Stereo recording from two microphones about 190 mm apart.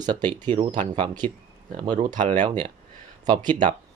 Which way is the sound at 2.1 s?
40° right (ahead or behind).